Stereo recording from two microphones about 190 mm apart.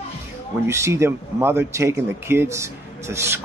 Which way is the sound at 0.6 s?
15° right (ahead or behind).